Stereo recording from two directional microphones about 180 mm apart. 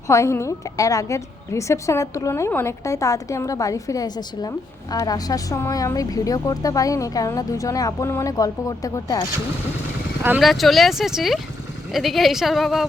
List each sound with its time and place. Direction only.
0.1 s a woman's voice: 15° left (ahead or behind)
10.2 s a woman's voice: 10° right (ahead or behind)